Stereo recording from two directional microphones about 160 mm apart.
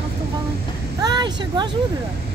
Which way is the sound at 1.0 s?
25° right (ahead or behind).